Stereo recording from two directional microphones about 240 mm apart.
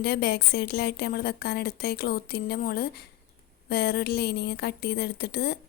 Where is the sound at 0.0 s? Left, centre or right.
Left.